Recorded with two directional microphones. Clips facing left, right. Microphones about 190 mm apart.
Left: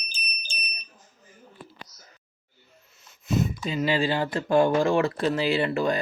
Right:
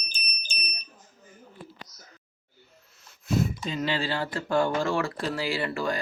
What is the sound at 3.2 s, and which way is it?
Speech, 5° left (ahead or behind).